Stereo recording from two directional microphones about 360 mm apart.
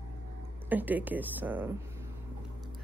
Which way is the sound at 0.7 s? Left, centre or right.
Centre.